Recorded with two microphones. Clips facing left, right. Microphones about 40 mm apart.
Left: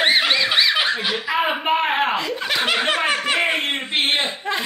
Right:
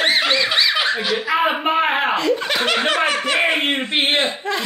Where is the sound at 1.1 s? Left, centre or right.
Centre.